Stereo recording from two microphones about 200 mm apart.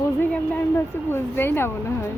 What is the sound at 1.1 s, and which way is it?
Speech, 10° left (ahead or behind).